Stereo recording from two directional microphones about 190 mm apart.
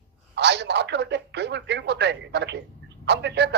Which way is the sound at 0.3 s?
65° right (ahead or behind).